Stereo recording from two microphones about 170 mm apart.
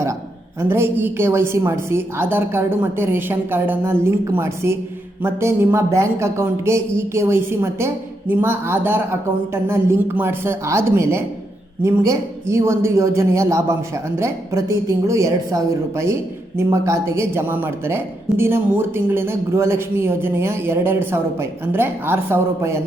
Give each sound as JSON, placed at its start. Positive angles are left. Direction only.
{"t": 0.6, "sound": "speech", "side_deg": -15}